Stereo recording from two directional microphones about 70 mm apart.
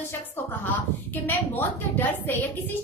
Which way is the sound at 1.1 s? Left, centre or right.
Left.